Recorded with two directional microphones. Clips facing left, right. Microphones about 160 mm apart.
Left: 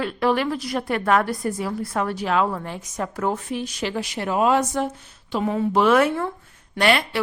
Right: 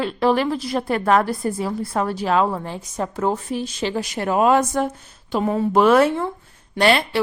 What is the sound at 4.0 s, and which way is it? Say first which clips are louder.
Speech: right 3 dB; 45° right (ahead or behind).